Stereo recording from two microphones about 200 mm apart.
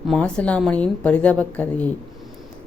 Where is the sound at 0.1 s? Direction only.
5° left (ahead or behind).